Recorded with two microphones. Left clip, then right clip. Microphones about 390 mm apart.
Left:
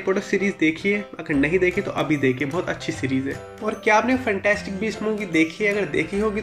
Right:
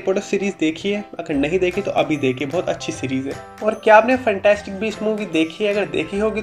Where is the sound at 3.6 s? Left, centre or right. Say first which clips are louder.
Right 7 dB; right.